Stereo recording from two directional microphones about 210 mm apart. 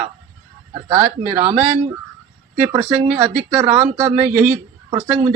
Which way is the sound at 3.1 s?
30° right (ahead or behind).